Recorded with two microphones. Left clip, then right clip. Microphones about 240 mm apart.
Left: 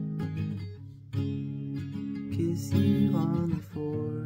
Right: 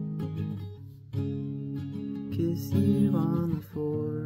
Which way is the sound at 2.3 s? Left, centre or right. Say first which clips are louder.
Right 1 dB; centre.